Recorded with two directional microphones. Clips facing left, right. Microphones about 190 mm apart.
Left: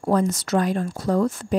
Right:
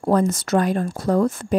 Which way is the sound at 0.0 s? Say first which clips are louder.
Right 2 dB; 55° right (ahead or behind).